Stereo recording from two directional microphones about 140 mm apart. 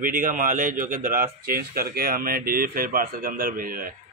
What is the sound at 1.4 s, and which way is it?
Speech, 90° right.